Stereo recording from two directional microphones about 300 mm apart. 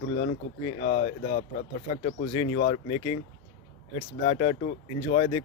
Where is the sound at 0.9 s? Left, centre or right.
Left.